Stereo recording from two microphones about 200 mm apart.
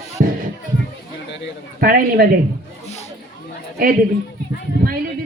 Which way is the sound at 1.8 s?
45° right (ahead or behind).